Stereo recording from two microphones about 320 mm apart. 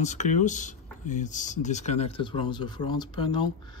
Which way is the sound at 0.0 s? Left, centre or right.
Left.